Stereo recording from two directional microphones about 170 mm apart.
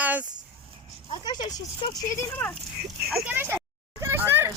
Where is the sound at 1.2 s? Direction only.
25° left (ahead or behind).